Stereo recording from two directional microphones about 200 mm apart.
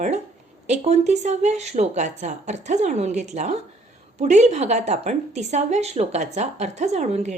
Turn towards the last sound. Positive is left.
turn(degrees=-35)  # may be behind; listen again after turning